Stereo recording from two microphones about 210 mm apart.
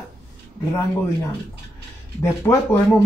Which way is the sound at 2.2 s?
15° left (ahead or behind).